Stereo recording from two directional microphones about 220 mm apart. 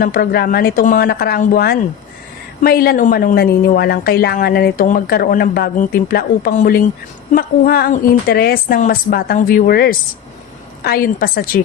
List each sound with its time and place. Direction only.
0.0 s a woman's voice: 40° left (ahead or behind)